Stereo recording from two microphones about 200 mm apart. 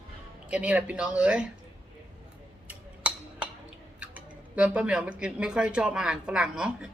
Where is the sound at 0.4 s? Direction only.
5° right (ahead or behind).